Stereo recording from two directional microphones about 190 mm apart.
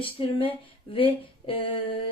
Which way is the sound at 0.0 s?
30° left (ahead or behind).